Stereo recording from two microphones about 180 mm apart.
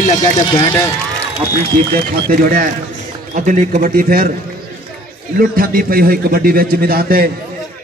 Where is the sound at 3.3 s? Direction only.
45° right (ahead or behind).